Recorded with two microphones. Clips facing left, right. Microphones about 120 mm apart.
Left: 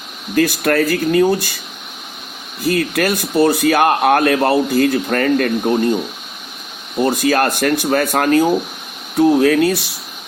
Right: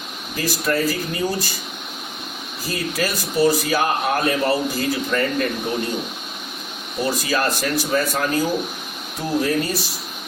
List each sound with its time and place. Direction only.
0.3 s speech: 65° left (ahead or behind)
2.6 s speech: 60° left (ahead or behind)
7.0 s speech: 55° left (ahead or behind); by 9.8 s 70° left (ahead or behind)